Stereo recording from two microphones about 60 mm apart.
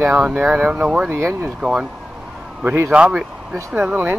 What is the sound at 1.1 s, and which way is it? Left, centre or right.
Speech, right.